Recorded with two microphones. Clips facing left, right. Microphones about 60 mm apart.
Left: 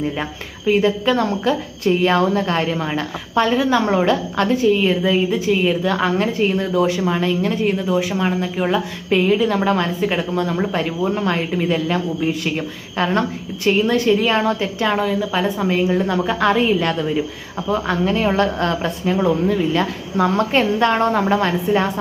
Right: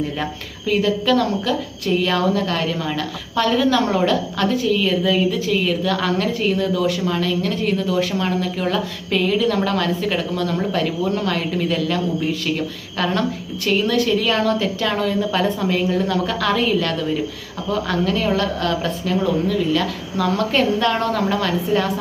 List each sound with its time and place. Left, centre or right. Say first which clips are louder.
0.2 s speech: even; left
10.8 s a woman's voice: left 1 dB; centre
11.3 s speech: left 2 dB; left
15.0 s a woman's voice: even; centre
15.6 s speech: left 2 dB; centre
19.1 s speech: left 2 dB; centre
19.5 s speech: left 1 dB; left